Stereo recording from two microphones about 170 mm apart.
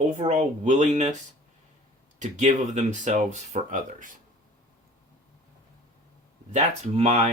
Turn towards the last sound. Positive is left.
turn(degrees=-40)  # may be behind; listen again after turning